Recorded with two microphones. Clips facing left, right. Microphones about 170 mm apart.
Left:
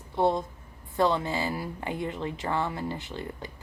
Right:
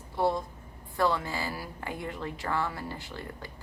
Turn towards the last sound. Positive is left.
turn(degrees=20)  # may be behind; listen again after turning